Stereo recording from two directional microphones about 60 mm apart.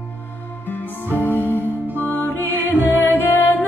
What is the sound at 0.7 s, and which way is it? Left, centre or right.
Music, left.